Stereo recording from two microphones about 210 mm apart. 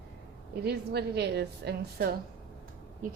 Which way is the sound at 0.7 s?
50° right (ahead or behind).